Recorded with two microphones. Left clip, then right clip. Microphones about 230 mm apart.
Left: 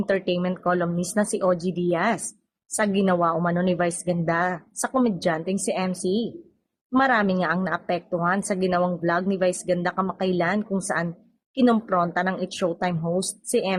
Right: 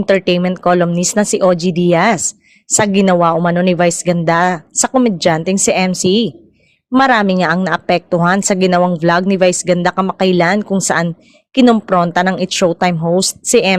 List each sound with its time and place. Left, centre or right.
0.0 s a woman's voice: right